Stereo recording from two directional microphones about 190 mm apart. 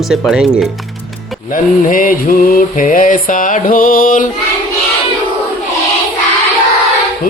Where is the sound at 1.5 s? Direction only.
45° left (ahead or behind).